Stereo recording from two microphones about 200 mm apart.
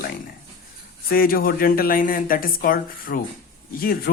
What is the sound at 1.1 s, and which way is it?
Speech, 45° left (ahead or behind).